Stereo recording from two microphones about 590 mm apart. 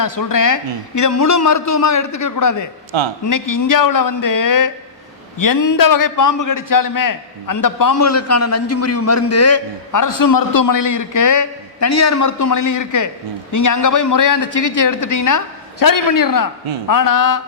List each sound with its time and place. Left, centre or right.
0.0 s a man's voice: left
2.9 s speech: right
3.2 s a man's voice: left